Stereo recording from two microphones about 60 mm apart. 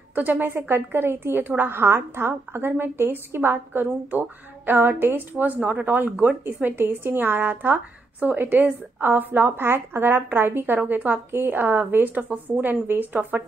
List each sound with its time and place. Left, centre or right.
0.1 s a woman's voice: right